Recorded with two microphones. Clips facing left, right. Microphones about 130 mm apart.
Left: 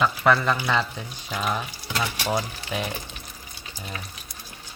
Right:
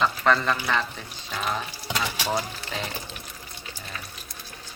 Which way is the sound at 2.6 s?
15° left (ahead or behind).